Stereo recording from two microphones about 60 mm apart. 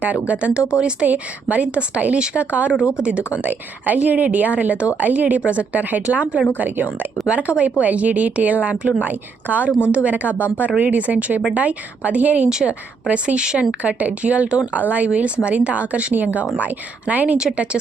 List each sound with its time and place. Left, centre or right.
0.0 s a woman's voice: right
1.0 s a woman's voice: right
7.3 s speech: centre
12.5 s a woman's voice: centre
17.3 s a woman's voice: centre